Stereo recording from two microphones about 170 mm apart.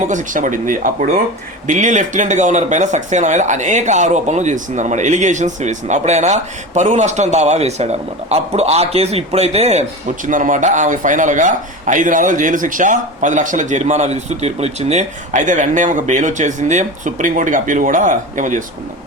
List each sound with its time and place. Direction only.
0.1 s speech: 50° right (ahead or behind)